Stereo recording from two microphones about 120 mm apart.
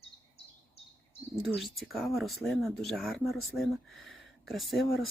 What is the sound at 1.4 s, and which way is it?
Speech, centre (ahead or behind).